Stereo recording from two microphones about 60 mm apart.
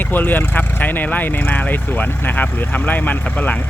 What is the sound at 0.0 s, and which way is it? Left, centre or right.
Speech, left.